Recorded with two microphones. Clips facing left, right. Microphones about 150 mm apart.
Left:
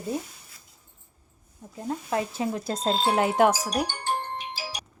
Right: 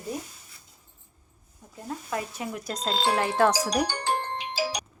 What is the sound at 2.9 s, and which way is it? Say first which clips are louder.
Speech: right 1 dB; 90° right.